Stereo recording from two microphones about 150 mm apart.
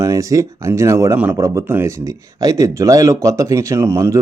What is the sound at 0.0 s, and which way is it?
Speech, 20° right (ahead or behind).